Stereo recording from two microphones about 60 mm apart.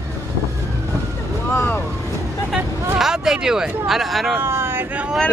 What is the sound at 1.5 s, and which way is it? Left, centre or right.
Boat, left.